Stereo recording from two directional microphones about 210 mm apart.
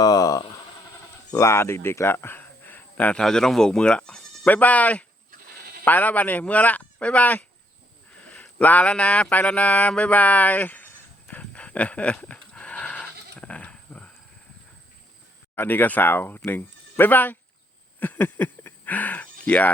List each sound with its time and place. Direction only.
0.0 s speech: 15° left (ahead or behind)
5.3 s sheep: 45° right (ahead or behind)
5.8 s speech: 10° left (ahead or behind)
8.1 s a sound: 5° left (ahead or behind)
15.5 s speech: 10° left (ahead or behind)
18.0 s a sound: 10° left (ahead or behind)